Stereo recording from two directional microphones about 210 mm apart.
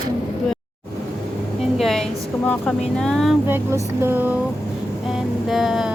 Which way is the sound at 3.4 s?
10° right (ahead or behind).